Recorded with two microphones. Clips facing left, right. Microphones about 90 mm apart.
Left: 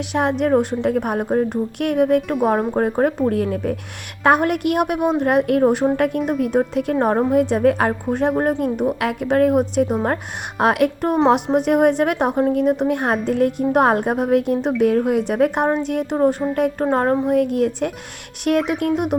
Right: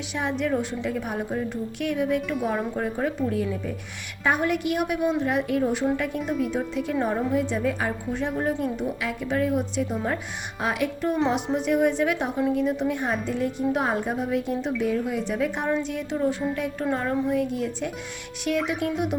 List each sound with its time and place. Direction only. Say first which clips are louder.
0.1 s a woman's voice: left 8 dB; 60° left (ahead or behind)
18.5 s a woman's voice: left 7 dB; 50° left (ahead or behind)